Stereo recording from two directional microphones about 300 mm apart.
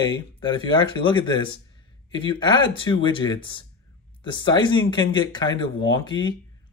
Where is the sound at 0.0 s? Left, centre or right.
Centre.